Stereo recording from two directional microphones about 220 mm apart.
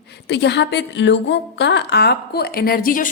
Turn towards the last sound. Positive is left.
turn(degrees=40)  # may be behind; listen again after turning